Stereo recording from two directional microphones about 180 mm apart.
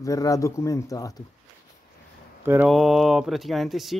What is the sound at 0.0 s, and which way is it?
Speech, 20° left (ahead or behind).